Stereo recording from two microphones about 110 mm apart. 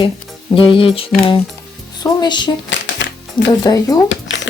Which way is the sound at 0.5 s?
55° left (ahead or behind).